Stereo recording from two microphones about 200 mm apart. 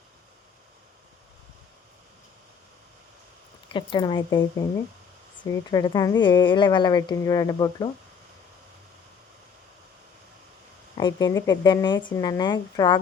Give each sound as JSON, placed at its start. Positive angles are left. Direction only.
{"t": 3.7, "sound": "speech", "side_deg": 25}
{"t": 5.5, "sound": "speech", "side_deg": 20}
{"t": 10.9, "sound": "speech", "side_deg": 20}